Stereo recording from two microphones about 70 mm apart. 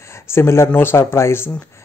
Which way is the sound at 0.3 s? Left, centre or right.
Left.